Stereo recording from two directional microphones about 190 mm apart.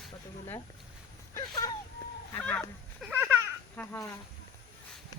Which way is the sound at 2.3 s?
10° left (ahead or behind).